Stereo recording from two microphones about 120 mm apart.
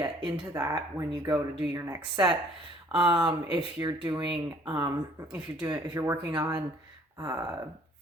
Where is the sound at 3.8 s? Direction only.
30° right (ahead or behind).